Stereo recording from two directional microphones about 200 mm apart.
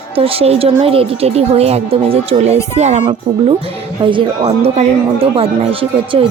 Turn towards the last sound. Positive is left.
turn(degrees=-25)  # may be behind; listen again after turning